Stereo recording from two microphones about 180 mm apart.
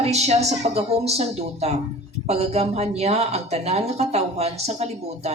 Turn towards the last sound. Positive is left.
turn(degrees=-35)  # may be behind; listen again after turning